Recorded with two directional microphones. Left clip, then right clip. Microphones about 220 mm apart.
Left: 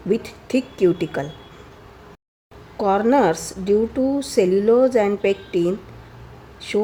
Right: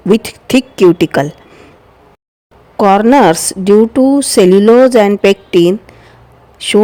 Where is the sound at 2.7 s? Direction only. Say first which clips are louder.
Right 10 dB; 45° right (ahead or behind).